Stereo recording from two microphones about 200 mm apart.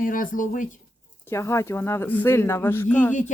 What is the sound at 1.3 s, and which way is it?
A man's voice, 15° left (ahead or behind).